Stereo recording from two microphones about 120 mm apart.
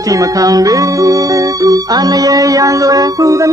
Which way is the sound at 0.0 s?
30° right (ahead or behind).